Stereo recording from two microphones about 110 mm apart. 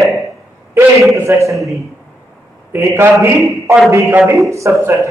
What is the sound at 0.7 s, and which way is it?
Speech, 25° right (ahead or behind).